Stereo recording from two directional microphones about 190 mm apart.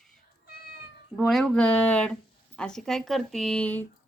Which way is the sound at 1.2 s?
Centre (ahead or behind).